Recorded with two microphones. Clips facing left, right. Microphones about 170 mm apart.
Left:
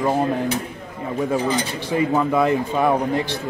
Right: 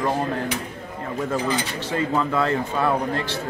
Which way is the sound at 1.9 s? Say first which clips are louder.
Left 4 dB; 15° left (ahead or behind).